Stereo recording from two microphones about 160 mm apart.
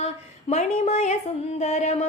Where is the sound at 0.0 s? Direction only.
40° left (ahead or behind).